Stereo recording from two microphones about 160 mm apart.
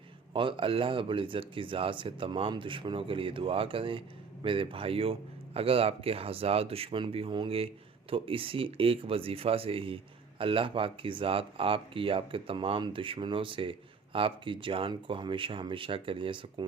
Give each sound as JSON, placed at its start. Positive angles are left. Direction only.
{"t": 0.3, "sound": "speech", "side_deg": -30}